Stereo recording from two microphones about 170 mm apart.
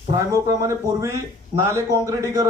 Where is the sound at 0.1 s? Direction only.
20° right (ahead or behind).